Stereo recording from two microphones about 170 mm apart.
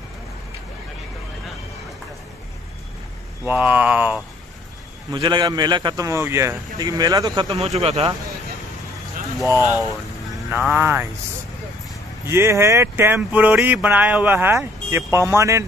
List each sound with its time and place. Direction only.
3.4 s speech: 10° right (ahead or behind)
5.1 s speech: 25° right (ahead or behind)
7.5 s speech: 35° right (ahead or behind)
9.5 s speech: 10° right (ahead or behind)
12.3 s speech: 15° right (ahead or behind)